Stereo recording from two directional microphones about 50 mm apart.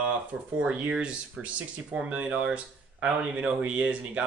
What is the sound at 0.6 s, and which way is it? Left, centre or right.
Speech, centre.